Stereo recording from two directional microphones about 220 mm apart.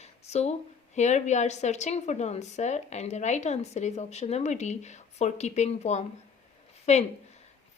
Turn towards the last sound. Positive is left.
turn(degrees=30)  # may be behind; listen again after turning